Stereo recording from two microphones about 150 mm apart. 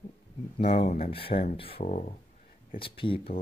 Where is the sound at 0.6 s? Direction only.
45° left (ahead or behind).